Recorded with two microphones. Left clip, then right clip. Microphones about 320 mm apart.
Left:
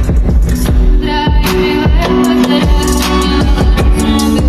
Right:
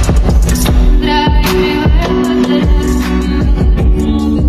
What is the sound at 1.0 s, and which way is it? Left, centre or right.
Music, centre.